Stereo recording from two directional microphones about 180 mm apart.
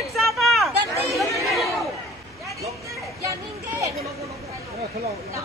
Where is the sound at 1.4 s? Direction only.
Centre (ahead or behind).